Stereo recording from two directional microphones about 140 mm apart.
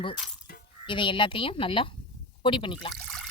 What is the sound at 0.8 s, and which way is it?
A woman's voice, 35° left (ahead or behind).